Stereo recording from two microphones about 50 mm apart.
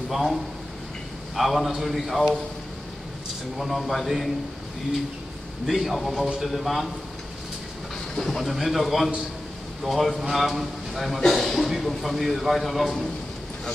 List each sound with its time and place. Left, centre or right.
0.1 s a man's voice: centre
3.5 s a man's voice: centre
5.7 s a man's voice: centre
8.2 s a man's voice: centre